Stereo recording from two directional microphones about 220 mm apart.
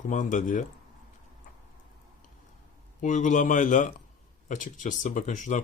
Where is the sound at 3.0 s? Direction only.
35° left (ahead or behind).